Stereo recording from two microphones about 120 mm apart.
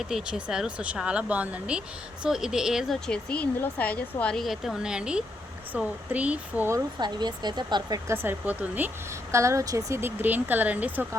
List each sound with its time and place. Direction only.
0.1 s speech: 5° right (ahead or behind)
3.1 s speech: 10° left (ahead or behind); by 6.7 s 10° right (ahead or behind)
7.0 s speech: 35° right (ahead or behind); by 11.0 s 15° right (ahead or behind)